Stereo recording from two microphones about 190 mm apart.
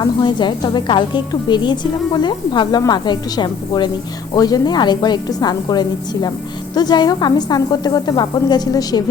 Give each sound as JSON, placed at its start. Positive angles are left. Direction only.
{"t": 0.0, "sound": "a woman's voice", "side_deg": 25}